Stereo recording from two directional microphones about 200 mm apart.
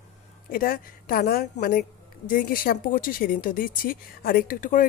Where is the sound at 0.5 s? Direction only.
45° left (ahead or behind).